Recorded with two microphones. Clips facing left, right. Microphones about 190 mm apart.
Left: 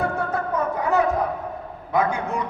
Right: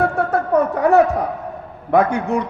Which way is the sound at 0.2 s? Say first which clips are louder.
Right 8 dB; 70° right (ahead or behind).